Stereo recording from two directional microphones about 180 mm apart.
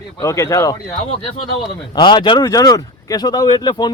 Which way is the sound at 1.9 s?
25° left (ahead or behind).